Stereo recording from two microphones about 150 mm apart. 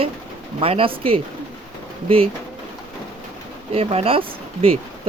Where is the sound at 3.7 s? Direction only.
40° right (ahead or behind).